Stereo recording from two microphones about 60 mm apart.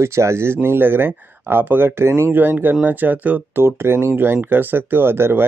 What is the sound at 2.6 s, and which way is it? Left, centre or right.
Speech, right.